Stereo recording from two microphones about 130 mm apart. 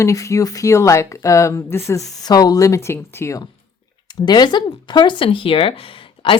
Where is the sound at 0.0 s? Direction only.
25° left (ahead or behind).